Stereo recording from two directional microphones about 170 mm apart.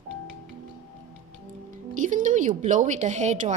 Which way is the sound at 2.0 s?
50° right (ahead or behind).